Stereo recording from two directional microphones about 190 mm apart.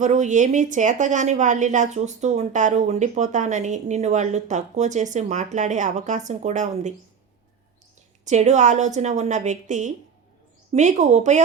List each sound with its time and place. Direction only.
0.0 s a woman's voice: 40° right (ahead or behind)
8.2 s a woman's voice: 40° right (ahead or behind)